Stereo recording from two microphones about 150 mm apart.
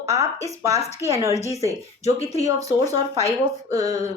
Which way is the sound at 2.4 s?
20° right (ahead or behind).